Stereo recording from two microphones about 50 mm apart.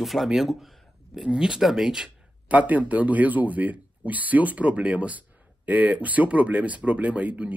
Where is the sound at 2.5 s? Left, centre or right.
Right.